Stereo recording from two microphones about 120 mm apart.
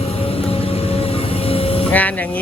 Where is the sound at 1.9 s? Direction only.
15° left (ahead or behind).